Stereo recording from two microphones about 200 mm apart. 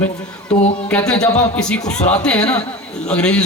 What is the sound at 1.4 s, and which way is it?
A man's voice, 5° left (ahead or behind).